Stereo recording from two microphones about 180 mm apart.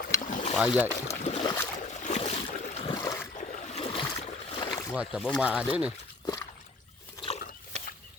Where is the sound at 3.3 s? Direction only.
40° left (ahead or behind); by 4.9 s 25° left (ahead or behind).